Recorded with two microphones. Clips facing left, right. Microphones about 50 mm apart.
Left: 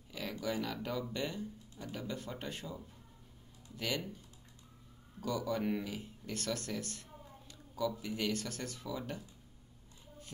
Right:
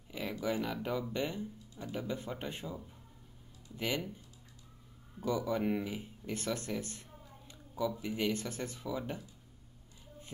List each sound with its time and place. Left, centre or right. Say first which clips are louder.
0.1 s a sound: right 3 dB; right
1.1 s speech: right 2 dB; right
5.2 s speech: right 2 dB; right